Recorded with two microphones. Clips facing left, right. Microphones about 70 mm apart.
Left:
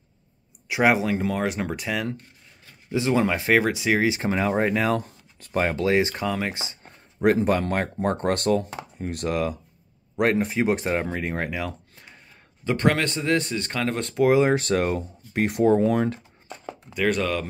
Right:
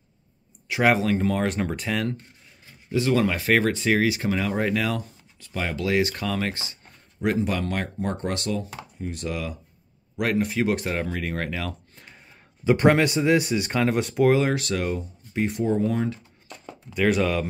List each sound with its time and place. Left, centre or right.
0.7 s speech: centre
2.9 s speech: left
4.1 s speech: left
5.0 s speech: left
7.2 s speech: left
9.1 s speech: left
10.1 s speech: left
11.9 s a sound: centre
12.6 s speech: centre
14.4 s speech: left
16.9 s speech: centre